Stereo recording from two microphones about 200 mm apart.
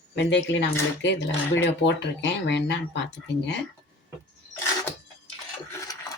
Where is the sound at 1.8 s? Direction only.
60° left (ahead or behind).